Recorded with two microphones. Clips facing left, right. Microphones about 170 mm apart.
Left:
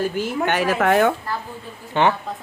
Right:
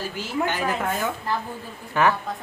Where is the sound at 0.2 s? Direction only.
70° left (ahead or behind).